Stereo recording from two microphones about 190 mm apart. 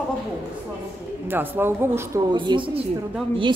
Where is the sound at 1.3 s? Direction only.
10° right (ahead or behind).